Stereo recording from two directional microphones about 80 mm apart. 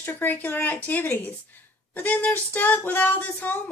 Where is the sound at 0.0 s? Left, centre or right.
Left.